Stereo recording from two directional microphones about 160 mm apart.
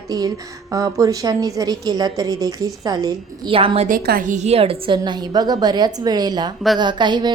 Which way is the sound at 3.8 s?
65° right (ahead or behind).